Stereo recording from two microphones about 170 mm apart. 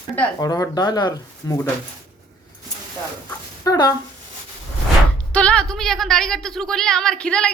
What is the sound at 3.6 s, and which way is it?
Speech, 25° left (ahead or behind).